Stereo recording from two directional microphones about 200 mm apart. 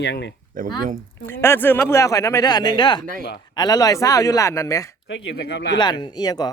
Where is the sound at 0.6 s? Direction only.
45° right (ahead or behind).